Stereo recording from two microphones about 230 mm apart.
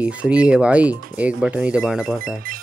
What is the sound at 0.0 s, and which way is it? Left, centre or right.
Speech, centre.